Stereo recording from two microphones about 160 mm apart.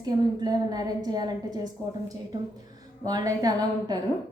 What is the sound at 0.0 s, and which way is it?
A woman's voice, 25° right (ahead or behind).